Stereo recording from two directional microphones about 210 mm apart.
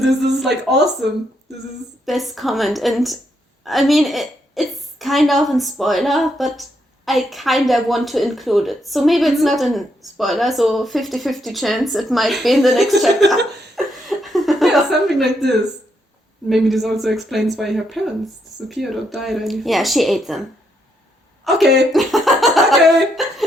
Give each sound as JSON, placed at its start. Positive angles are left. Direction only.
{"t": 0.3, "sound": "a woman's voice", "side_deg": 0}
{"t": 2.0, "sound": "a woman's voice", "side_deg": 0}
{"t": 13.7, "sound": "chuckle", "side_deg": 0}
{"t": 16.5, "sound": "a woman's voice", "side_deg": 0}
{"t": 21.4, "sound": "speech", "side_deg": 0}
{"t": 21.9, "sound": "a sound", "side_deg": 0}